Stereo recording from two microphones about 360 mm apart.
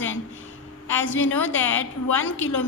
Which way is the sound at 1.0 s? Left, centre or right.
Left.